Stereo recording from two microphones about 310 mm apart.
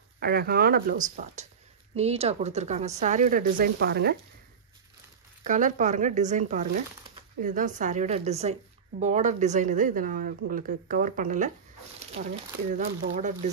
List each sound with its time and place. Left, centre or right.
0.2 s speech: right
5.4 s speech: right
12.7 s speech: right